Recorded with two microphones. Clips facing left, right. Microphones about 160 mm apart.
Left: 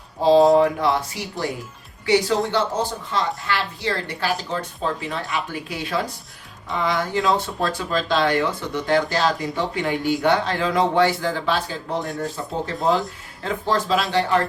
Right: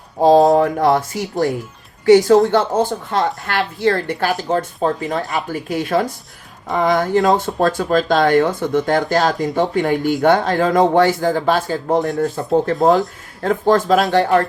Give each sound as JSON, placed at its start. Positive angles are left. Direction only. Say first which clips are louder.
{"t": 0.2, "sound": "speech", "louder": "right 3 dB", "side_deg": -45}
{"t": 12.4, "sound": "speech", "louder": "right 11 dB", "side_deg": -65}
{"t": 13.4, "sound": "speech", "louder": "right 8 dB", "side_deg": -50}